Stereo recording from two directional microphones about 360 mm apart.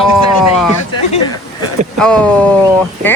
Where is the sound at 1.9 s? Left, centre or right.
Centre.